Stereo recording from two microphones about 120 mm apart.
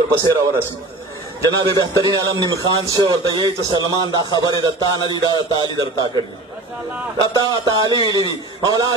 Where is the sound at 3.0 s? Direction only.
40° right (ahead or behind).